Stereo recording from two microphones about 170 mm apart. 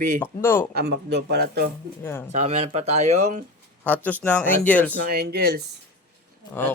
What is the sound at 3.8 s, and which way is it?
Speech, 10° left (ahead or behind).